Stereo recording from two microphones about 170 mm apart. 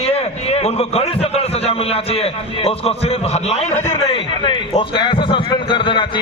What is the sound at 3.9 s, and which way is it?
A man's voice, 30° left (ahead or behind).